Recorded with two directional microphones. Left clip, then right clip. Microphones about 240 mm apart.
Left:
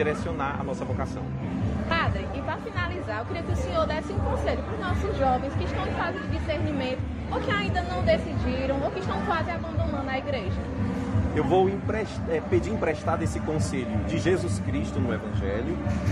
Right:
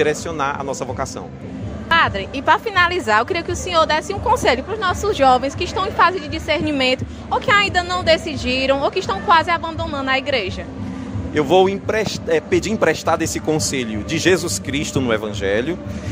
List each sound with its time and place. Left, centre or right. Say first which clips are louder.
0.0 s a man's voice: right 8 dB; right